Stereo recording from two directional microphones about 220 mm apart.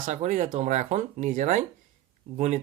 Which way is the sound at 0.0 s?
35° right (ahead or behind).